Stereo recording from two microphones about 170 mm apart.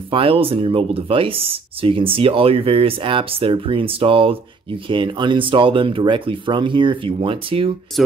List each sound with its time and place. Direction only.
0.1 s speech: 30° right (ahead or behind)